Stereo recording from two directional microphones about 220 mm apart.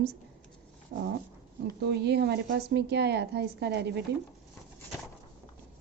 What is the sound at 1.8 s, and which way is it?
Speech, 50° right (ahead or behind).